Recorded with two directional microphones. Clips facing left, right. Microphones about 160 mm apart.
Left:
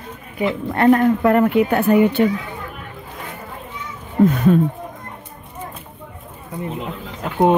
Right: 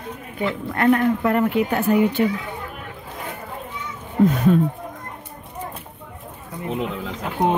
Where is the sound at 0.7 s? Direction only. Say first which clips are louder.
Left 4 dB; 35° left (ahead or behind).